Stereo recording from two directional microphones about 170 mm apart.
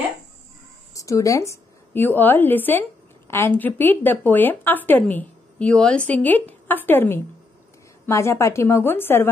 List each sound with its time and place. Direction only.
0.9 s a woman's voice: 20° left (ahead or behind)